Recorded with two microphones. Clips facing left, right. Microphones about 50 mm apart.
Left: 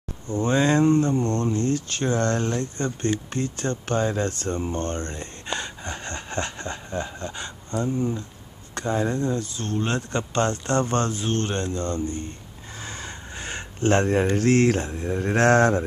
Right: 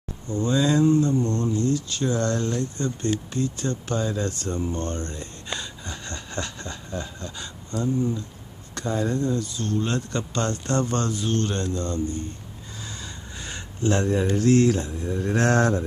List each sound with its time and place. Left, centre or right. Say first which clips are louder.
0.3 s speech: left 1 dB; left